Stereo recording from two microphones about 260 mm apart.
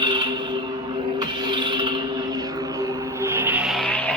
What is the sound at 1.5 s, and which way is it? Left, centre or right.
Music, centre.